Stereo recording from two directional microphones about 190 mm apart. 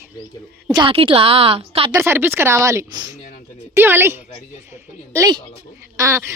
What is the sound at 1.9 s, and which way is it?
Speech, 15° right (ahead or behind).